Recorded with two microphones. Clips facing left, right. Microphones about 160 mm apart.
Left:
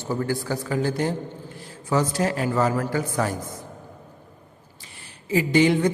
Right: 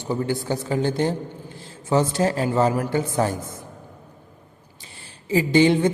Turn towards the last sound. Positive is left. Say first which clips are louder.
# right 2 dB
turn(degrees=-25)  # may be behind; listen again after turning